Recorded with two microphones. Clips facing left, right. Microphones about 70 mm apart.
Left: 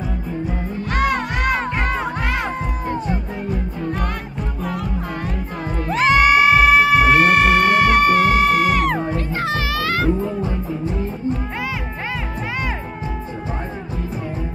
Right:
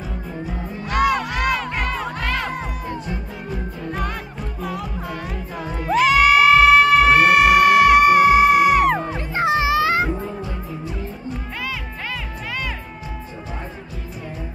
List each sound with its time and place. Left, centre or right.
0.8 s music: left
2.2 s music: centre
4.6 s music: centre
5.9 s music: left
6.5 s music: centre
7.1 s music: centre
9.1 s cat: right
10.4 s music: left